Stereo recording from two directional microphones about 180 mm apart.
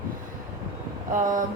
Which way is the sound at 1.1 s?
45° right (ahead or behind).